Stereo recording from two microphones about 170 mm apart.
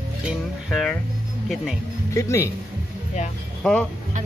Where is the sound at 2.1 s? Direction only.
15° left (ahead or behind).